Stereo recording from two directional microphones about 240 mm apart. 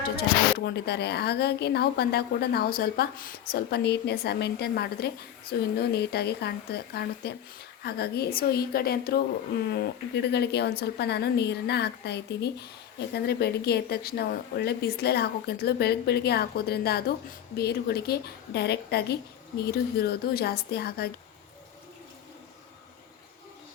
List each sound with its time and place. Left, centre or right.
0.6 s a woman's voice: left